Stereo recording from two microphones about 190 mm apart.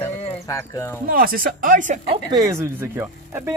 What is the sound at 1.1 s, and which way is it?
Speech, 50° right (ahead or behind).